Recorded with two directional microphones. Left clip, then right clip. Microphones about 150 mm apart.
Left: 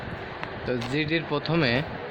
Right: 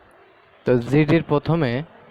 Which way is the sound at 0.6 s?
90° right.